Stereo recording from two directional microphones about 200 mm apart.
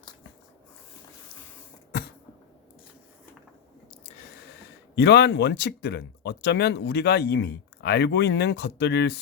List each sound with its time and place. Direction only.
4.9 s speech: 60° left (ahead or behind)